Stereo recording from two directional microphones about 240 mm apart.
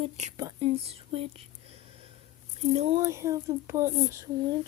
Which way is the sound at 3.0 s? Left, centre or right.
Centre.